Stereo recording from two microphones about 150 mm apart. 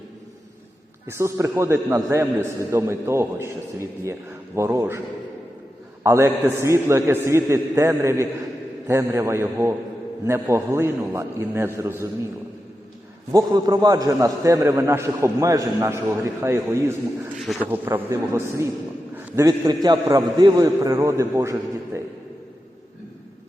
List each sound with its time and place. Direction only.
1.0 s a man's voice: 20° right (ahead or behind)
13.3 s a man's voice: 25° right (ahead or behind)
17.3 s speech: centre (ahead or behind)
17.7 s a man's voice: 15° right (ahead or behind)